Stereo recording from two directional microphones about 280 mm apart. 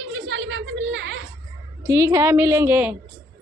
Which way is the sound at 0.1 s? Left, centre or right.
Right.